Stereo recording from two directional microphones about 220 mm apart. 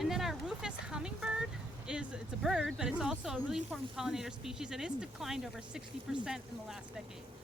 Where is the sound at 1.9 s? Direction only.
5° right (ahead or behind).